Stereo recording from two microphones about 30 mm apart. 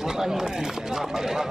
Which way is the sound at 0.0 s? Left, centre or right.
Centre.